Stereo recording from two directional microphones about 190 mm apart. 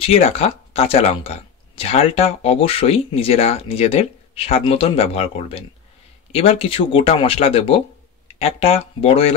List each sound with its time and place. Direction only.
0.0 s speech: 30° left (ahead or behind)